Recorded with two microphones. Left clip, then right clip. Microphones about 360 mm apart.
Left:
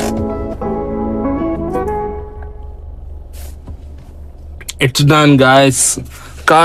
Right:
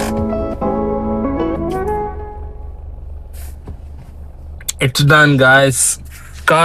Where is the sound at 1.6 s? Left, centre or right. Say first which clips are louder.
Left 1 dB; centre.